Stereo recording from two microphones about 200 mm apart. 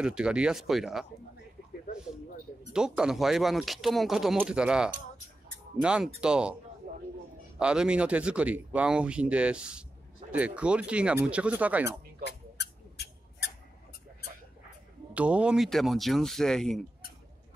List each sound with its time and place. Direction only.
0.0 s speech: 5° right (ahead or behind)
2.7 s speech: 5° right (ahead or behind)
6.8 s a sound: 40° right (ahead or behind)
7.5 s speech: 5° right (ahead or behind)
12.3 s a sound: 60° left (ahead or behind)
15.1 s speech: 5° right (ahead or behind)